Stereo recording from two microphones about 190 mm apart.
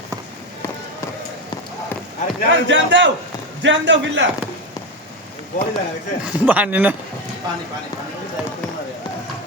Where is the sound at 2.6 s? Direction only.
75° right (ahead or behind).